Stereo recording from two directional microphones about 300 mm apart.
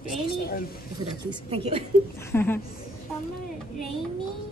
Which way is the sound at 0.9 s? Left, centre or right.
Centre.